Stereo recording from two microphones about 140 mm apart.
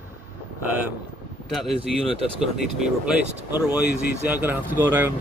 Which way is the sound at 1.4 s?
Centre (ahead or behind).